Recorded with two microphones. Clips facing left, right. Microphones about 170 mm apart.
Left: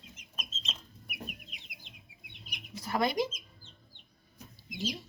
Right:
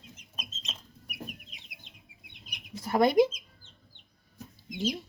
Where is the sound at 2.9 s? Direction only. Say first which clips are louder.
Right 8 dB; 50° right (ahead or behind).